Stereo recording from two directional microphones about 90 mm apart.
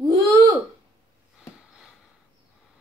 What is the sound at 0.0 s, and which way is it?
Hiccup, 40° right (ahead or behind).